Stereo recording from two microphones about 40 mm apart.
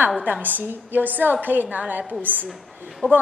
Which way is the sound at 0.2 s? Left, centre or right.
Right.